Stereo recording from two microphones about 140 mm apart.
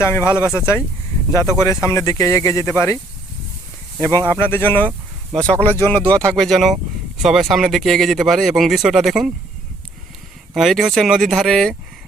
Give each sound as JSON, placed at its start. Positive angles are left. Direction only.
{"t": 0.0, "sound": "speech", "side_deg": 15}
{"t": 4.3, "sound": "speech", "side_deg": 15}
{"t": 10.5, "sound": "speech", "side_deg": 0}